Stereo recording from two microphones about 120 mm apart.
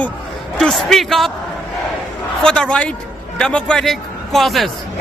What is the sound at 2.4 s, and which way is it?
A man's voice, 5° left (ahead or behind).